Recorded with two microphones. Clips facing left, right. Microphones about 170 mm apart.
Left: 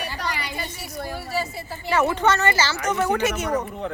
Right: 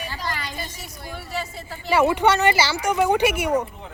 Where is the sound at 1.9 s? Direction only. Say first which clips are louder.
Right 2 dB; 10° right (ahead or behind).